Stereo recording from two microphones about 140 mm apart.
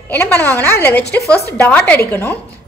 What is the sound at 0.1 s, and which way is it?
A woman's voice, 15° left (ahead or behind).